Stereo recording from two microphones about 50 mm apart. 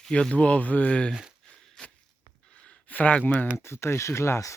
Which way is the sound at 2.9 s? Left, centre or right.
Left.